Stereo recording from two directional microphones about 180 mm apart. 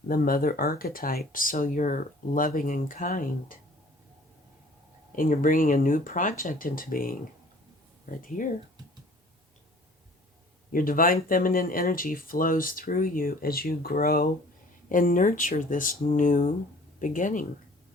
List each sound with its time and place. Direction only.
0.1 s speech: 55° left (ahead or behind)
5.1 s speech: 50° left (ahead or behind)
8.4 s speech: 45° left (ahead or behind)
10.7 s speech: 50° left (ahead or behind)